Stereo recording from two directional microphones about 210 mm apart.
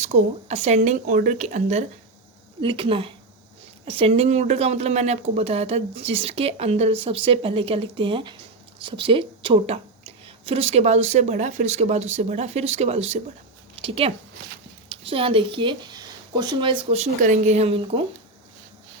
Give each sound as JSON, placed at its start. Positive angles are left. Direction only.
{"t": 0.0, "sound": "a woman's voice", "side_deg": -30}
{"t": 16.9, "sound": "a woman's voice", "side_deg": -30}